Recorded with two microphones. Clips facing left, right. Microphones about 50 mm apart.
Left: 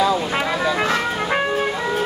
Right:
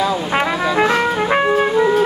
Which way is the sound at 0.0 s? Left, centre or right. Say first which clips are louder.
Right 2 dB; centre.